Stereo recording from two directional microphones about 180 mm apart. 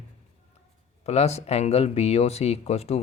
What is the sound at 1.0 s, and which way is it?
Speech, 35° left (ahead or behind).